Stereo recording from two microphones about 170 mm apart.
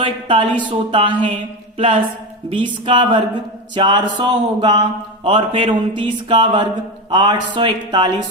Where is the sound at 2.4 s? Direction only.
30° right (ahead or behind).